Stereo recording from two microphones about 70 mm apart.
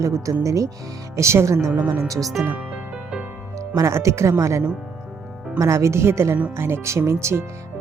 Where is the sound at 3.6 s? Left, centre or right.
Right.